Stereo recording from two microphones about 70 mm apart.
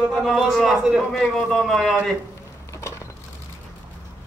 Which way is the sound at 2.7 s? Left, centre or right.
Left.